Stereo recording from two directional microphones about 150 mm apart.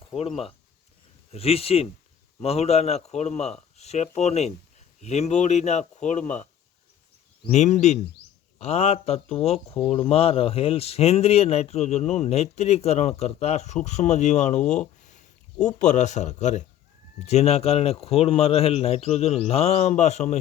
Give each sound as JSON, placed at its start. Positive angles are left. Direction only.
{"t": 0.0, "sound": "speech", "side_deg": 40}
{"t": 7.5, "sound": "speech", "side_deg": 50}